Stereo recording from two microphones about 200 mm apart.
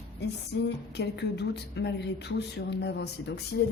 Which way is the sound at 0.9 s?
60° left (ahead or behind).